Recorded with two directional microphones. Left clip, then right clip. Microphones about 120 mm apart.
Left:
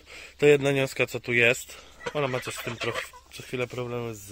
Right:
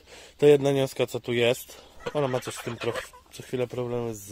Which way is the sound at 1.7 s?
50° right (ahead or behind).